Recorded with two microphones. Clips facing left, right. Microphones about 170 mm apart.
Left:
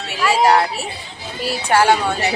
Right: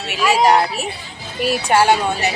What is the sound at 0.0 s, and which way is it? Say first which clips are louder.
A woman's voice: right 1 dB; 15° right (ahead or behind).